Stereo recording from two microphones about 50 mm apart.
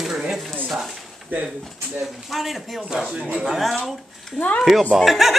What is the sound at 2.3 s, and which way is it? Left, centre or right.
Speech, centre.